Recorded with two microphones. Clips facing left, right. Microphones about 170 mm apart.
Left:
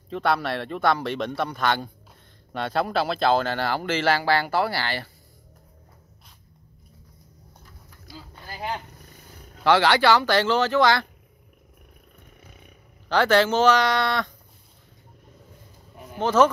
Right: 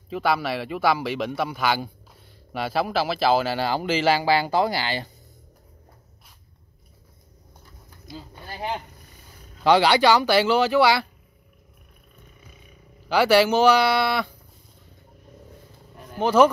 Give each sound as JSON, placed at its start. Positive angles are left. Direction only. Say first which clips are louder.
{"t": 0.1, "sound": "a man's voice", "louder": "even", "side_deg": -5}
{"t": 8.1, "sound": "vehicle", "louder": "right 3 dB", "side_deg": -20}
{"t": 9.6, "sound": "speech", "louder": "right 2 dB", "side_deg": -15}
{"t": 13.1, "sound": "speech", "louder": "right 2 dB", "side_deg": -10}
{"t": 16.2, "sound": "speech", "louder": "right 2 dB", "side_deg": -10}